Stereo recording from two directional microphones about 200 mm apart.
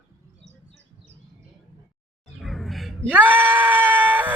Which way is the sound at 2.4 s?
Centre (ahead or behind).